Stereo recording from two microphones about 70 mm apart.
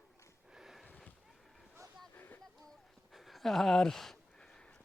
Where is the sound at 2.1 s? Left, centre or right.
Left.